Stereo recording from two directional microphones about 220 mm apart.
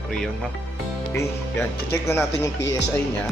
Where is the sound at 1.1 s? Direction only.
10° left (ahead or behind).